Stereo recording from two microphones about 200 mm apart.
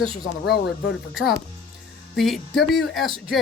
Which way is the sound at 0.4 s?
55° left (ahead or behind).